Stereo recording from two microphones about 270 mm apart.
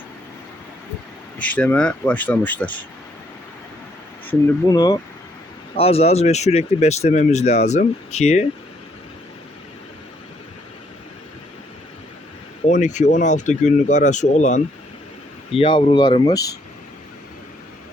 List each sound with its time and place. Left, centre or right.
1.4 s speech: centre
4.3 s speech: centre
12.6 s speech: left